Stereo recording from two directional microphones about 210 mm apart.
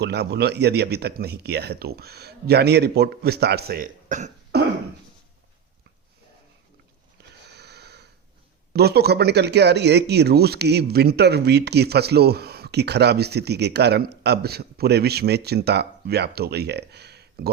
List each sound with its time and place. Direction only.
0.0 s speech: 50° right (ahead or behind)
7.4 s sniff: 50° right (ahead or behind)
8.7 s speech: 50° right (ahead or behind)